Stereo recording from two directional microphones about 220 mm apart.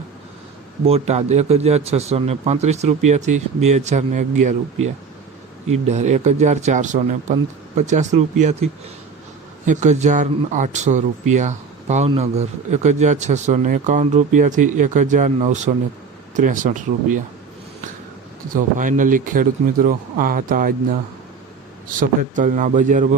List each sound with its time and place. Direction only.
0.9 s speech: 30° right (ahead or behind)
18.5 s speech: 35° right (ahead or behind)
22.0 s speech: 35° right (ahead or behind)